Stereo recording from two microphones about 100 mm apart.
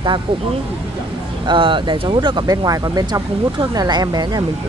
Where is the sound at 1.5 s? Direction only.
55° right (ahead or behind).